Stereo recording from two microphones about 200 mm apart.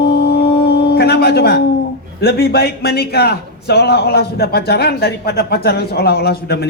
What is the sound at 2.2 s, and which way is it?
A man's voice, 55° left (ahead or behind).